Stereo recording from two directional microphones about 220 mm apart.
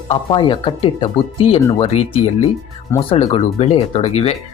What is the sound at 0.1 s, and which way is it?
Speech, 25° left (ahead or behind).